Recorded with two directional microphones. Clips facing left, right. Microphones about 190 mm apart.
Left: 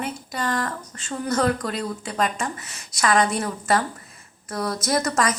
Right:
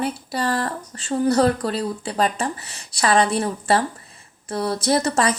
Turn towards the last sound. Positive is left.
turn(degrees=-30)  # may be behind; listen again after turning